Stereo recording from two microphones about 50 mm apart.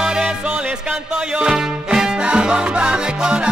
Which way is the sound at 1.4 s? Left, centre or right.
Centre.